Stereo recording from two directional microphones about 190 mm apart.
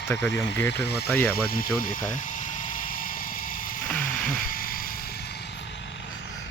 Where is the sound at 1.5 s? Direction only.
50° left (ahead or behind).